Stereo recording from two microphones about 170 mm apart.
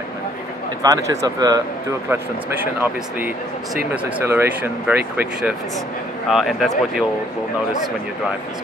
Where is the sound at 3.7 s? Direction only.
10° right (ahead or behind).